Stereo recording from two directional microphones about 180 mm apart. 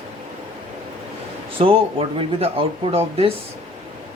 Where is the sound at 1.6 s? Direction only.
30° right (ahead or behind).